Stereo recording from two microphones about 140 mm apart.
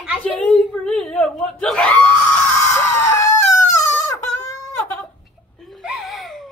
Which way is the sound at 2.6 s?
20° left (ahead or behind).